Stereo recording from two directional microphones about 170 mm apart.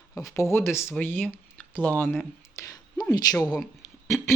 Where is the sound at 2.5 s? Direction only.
20° left (ahead or behind).